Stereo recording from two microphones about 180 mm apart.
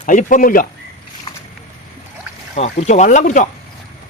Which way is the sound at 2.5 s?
40° left (ahead or behind).